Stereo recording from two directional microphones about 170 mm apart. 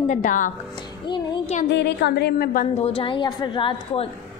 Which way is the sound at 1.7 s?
85° left.